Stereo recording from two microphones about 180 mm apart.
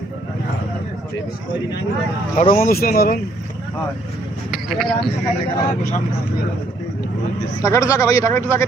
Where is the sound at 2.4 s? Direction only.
50° left (ahead or behind).